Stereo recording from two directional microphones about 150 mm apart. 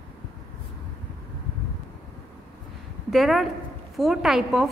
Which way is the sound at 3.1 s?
Centre (ahead or behind).